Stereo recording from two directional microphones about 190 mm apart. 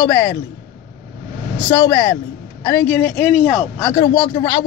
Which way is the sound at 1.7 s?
15° left (ahead or behind).